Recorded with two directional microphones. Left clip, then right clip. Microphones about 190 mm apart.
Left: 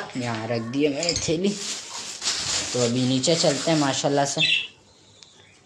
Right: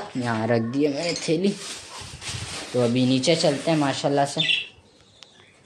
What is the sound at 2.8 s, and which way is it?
Speech, 15° right (ahead or behind).